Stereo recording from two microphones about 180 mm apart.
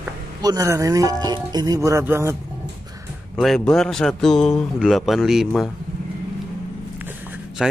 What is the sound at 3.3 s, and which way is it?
Speech, 5° left (ahead or behind).